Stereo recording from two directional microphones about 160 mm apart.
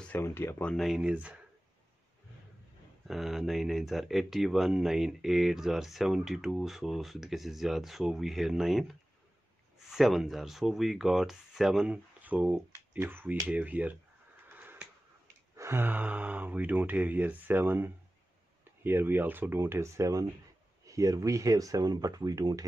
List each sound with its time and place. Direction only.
0.0 s speech: 10° left (ahead or behind); by 1.4 s 10° right (ahead or behind)
3.1 s speech: centre (ahead or behind)
14.5 s a sound: 10° right (ahead or behind)
15.5 s speech: 15° right (ahead or behind)